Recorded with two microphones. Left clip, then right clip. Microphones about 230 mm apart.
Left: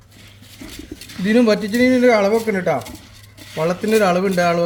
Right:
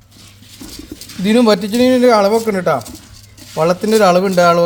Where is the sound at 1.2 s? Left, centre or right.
Right.